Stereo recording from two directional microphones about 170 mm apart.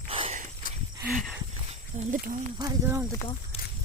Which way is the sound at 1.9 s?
45° right (ahead or behind).